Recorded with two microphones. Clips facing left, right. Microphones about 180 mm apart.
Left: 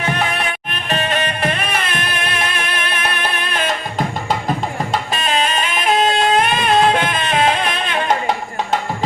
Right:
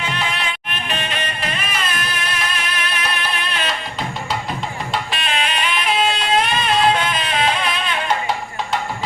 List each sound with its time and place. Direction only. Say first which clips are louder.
0.1 s music: left 7 dB; 55° left (ahead or behind)
0.9 s music: left 7 dB; 45° left (ahead or behind)